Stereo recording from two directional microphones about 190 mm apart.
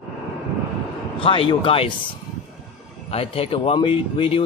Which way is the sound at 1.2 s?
30° left (ahead or behind).